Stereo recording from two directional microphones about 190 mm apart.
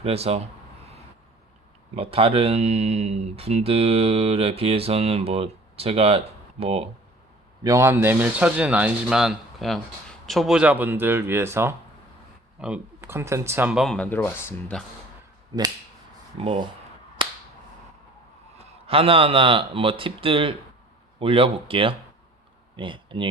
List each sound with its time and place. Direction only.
0.0 s speech: 30° right (ahead or behind)
2.0 s speech: 30° right (ahead or behind)
7.6 s speech: 15° right (ahead or behind); by 14.8 s 10° left (ahead or behind)
16.4 s speech: 30° right (ahead or behind)
18.5 s speech: 30° right (ahead or behind)